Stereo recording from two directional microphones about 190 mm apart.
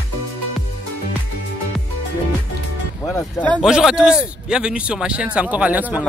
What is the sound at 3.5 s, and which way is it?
A man's voice, centre (ahead or behind).